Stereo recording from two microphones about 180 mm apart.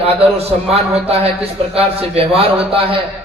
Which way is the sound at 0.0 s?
35° right (ahead or behind).